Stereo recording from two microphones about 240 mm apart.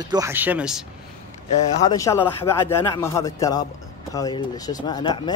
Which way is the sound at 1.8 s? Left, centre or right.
Centre.